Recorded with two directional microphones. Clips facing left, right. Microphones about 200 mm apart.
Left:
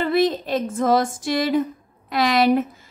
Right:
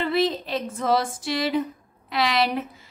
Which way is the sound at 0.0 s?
45° left (ahead or behind).